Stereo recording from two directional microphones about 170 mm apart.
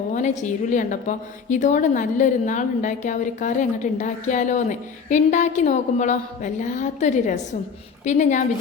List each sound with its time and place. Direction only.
0.1 s a woman's voice: 45° left (ahead or behind)